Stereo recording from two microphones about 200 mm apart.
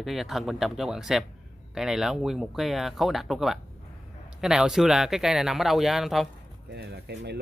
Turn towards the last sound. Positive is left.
turn(degrees=-55)  # may be behind; listen again after turning